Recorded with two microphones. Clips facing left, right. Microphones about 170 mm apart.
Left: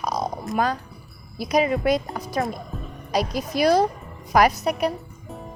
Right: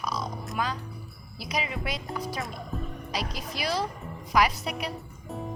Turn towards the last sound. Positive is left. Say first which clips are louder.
# left 9 dB
turn(degrees=45)  # may be behind; listen again after turning